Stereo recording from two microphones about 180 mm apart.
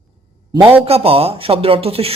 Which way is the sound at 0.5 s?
30° right (ahead or behind).